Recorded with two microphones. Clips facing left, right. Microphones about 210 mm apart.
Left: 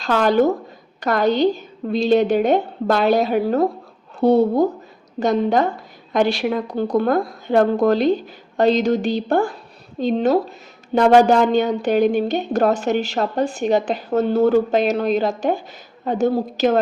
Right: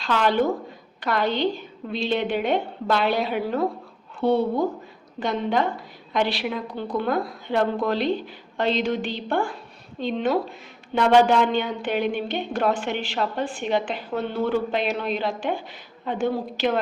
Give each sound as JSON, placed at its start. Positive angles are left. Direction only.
{"t": 0.0, "sound": "a woman's voice", "side_deg": 45}